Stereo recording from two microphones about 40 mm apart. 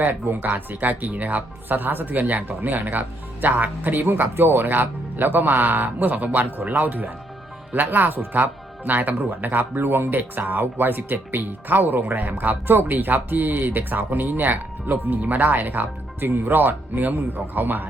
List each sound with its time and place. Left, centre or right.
0.0 s speech: right
12.2 s speech: right